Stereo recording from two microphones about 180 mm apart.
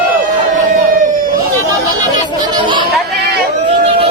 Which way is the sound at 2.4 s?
25° right (ahead or behind).